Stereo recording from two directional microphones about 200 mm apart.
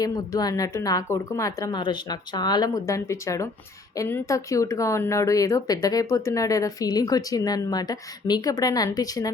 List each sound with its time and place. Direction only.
0.0 s speech: 20° left (ahead or behind)